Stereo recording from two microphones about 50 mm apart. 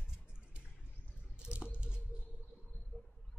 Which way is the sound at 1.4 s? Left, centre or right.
Right.